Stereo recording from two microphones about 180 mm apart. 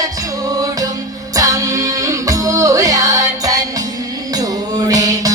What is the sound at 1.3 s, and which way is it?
Music, 20° right (ahead or behind).